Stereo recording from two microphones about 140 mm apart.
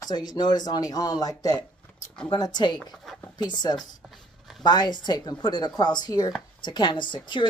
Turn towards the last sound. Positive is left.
turn(degrees=35)  # may be behind; listen again after turning